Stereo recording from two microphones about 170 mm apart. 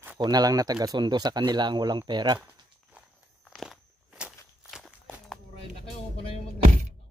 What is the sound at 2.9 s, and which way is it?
Walk, 5° right (ahead or behind).